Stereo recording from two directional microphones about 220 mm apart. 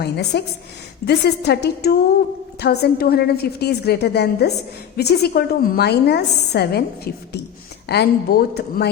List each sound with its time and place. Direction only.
0.0 s a woman's voice: 50° left (ahead or behind)